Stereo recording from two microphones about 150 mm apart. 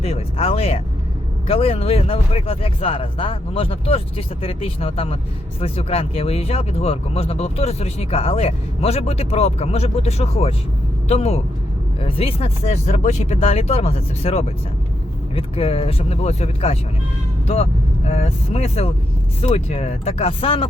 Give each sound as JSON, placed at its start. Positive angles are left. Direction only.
{"t": 0.0, "sound": "music", "side_deg": 40}
{"t": 1.5, "sound": "speech", "side_deg": 40}